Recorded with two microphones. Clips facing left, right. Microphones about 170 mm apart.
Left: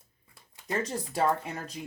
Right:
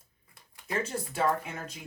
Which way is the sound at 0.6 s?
35° left (ahead or behind).